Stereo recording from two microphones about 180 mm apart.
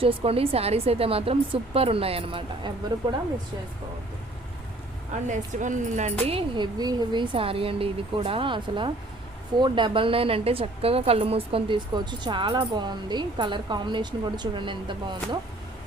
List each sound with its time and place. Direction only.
0.0 s a woman's voice: 30° right (ahead or behind)
5.5 s speech: 45° right (ahead or behind)
6.2 s a woman's voice: 30° right (ahead or behind)